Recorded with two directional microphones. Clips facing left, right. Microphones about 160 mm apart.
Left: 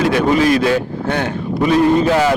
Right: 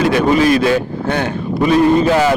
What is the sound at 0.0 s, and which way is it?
A man's voice, 15° right (ahead or behind).